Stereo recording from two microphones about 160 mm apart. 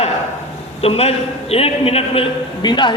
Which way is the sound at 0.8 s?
40° left (ahead or behind).